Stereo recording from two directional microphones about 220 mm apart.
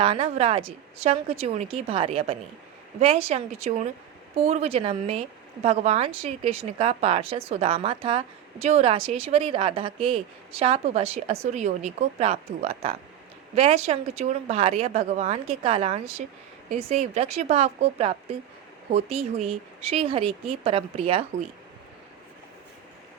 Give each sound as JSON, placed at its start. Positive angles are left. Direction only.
{"t": 0.0, "sound": "speech", "side_deg": -25}